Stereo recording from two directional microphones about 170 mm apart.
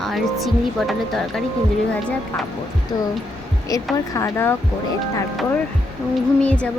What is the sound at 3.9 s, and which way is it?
Speech, 20° left (ahead or behind).